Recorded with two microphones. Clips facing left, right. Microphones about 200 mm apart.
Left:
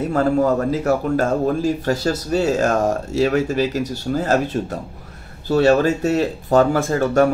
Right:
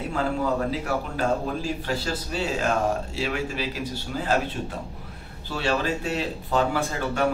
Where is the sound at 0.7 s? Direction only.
45° left (ahead or behind).